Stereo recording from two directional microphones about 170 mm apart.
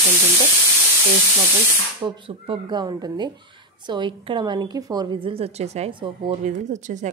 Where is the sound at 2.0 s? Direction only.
30° right (ahead or behind).